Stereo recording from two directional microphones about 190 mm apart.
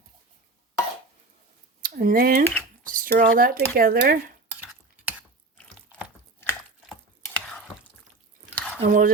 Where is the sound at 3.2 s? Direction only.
50° right (ahead or behind).